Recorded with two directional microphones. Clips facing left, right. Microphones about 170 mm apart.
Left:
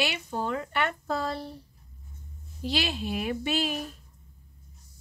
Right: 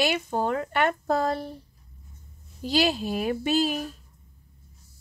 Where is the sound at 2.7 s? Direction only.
40° right (ahead or behind).